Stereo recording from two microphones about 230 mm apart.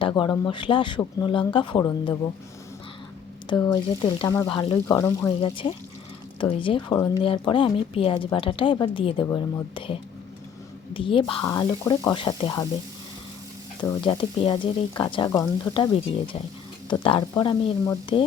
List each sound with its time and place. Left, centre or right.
0.0 s a woman's voice: centre
3.5 s a woman's voice: centre
13.8 s a woman's voice: left